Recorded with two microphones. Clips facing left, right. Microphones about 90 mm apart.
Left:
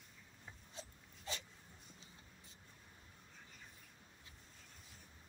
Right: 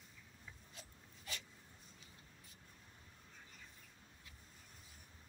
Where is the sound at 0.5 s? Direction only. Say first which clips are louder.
Left 5 dB; 30° left (ahead or behind).